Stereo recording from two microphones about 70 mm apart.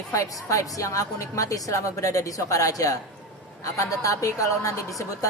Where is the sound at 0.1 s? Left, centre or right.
Left.